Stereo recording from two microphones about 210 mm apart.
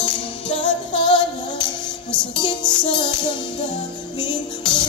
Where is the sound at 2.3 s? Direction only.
20° left (ahead or behind).